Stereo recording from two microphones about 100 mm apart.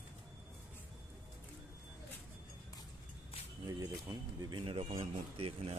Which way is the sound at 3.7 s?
50° right (ahead or behind).